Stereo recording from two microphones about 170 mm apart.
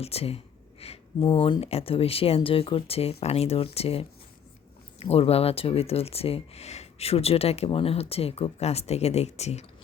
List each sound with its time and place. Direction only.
0.0 s speech: 35° left (ahead or behind)